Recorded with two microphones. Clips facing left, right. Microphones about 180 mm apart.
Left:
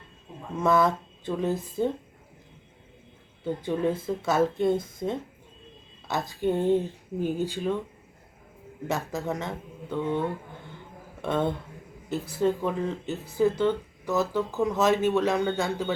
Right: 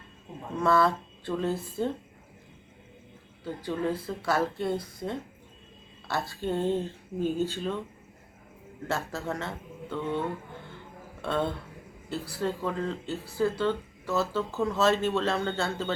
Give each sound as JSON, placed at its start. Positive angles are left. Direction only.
{"t": 0.5, "sound": "speech", "side_deg": 20}
{"t": 3.4, "sound": "speech", "side_deg": 20}
{"t": 8.9, "sound": "speech", "side_deg": 15}